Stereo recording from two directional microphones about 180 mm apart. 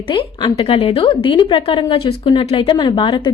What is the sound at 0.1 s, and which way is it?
A woman's voice, 25° left (ahead or behind).